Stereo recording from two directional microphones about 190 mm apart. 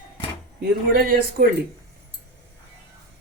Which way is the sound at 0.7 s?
50° right (ahead or behind).